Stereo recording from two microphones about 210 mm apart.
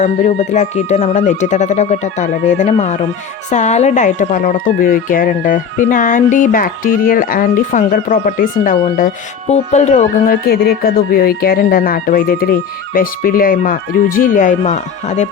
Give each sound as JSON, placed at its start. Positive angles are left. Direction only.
{"t": 0.0, "sound": "speech", "side_deg": 35}
{"t": 10.4, "sound": "speech", "side_deg": 50}